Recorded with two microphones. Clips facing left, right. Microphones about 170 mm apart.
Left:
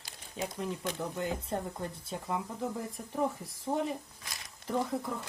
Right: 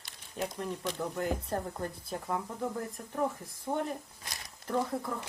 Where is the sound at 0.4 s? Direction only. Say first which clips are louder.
Even; centre (ahead or behind).